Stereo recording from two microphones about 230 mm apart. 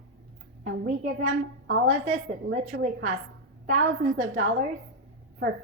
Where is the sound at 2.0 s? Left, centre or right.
Right.